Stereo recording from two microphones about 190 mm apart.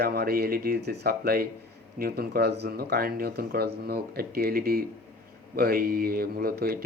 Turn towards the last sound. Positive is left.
turn(degrees=-55)  # may be behind; listen again after turning